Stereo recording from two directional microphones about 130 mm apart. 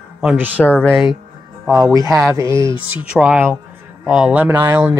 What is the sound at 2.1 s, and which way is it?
Speech, 25° right (ahead or behind).